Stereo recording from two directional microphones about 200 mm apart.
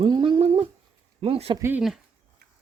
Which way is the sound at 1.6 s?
5° right (ahead or behind).